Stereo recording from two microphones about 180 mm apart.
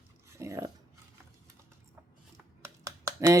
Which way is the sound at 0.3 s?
15° right (ahead or behind).